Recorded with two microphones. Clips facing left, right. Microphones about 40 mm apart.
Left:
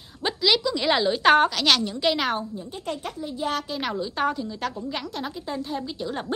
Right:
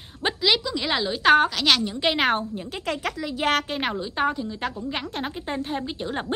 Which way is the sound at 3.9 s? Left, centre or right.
Centre.